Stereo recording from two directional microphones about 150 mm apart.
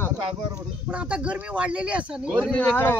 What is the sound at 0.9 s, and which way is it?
Speech, 5° right (ahead or behind).